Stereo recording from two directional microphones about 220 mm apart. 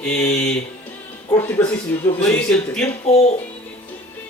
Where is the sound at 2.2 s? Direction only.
5° left (ahead or behind).